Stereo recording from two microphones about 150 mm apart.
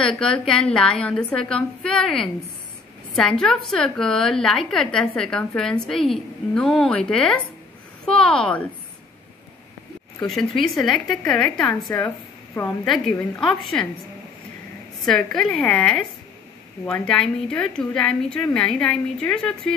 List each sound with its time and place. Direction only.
0.0 s a woman's voice: 5° left (ahead or behind)
10.2 s a woman's voice: centre (ahead or behind)
15.0 s a woman's voice: 5° left (ahead or behind)